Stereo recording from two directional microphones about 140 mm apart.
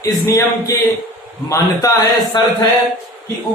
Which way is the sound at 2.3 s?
30° left (ahead or behind).